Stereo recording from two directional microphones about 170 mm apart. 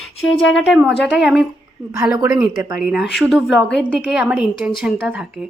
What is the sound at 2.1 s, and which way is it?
Speech, 20° right (ahead or behind).